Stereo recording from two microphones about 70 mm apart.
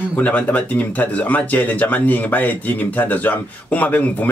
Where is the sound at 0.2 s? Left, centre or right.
Left.